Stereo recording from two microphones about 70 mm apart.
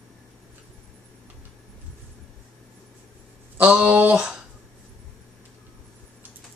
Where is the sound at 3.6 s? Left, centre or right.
Centre.